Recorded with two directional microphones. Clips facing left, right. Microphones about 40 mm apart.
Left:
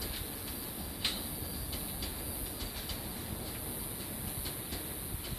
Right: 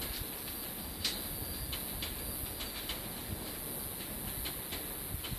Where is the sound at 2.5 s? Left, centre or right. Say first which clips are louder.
Right 1 dB; right.